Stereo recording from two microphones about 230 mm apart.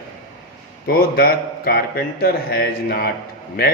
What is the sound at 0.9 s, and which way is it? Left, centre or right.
A man's voice, left.